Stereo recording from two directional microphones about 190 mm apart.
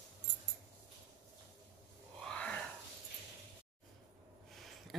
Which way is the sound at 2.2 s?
5° left (ahead or behind).